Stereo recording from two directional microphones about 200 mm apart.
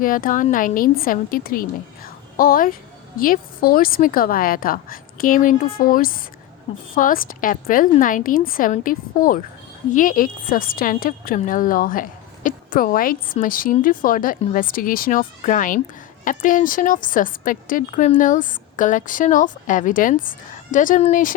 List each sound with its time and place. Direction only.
0.0 s a woman's voice: 45° left (ahead or behind)